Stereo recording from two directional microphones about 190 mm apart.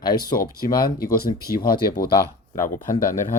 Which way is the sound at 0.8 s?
50° left (ahead or behind).